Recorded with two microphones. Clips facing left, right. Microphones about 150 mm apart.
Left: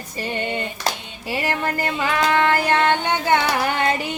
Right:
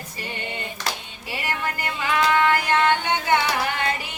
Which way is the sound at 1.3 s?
40° left (ahead or behind).